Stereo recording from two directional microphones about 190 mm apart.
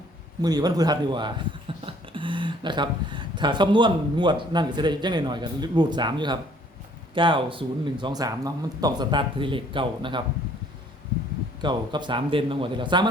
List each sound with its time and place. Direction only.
0.4 s speech: 20° right (ahead or behind)
11.6 s speech: 25° right (ahead or behind)